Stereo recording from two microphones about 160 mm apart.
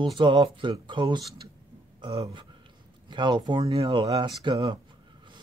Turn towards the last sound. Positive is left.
turn(degrees=-30)  # may be behind; listen again after turning